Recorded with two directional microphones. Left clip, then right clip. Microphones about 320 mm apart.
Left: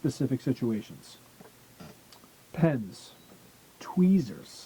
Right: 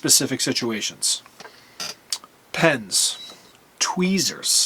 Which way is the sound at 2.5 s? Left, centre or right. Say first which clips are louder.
Right 11 dB; centre.